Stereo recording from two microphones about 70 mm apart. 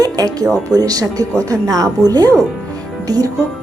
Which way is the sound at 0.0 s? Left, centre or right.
Right.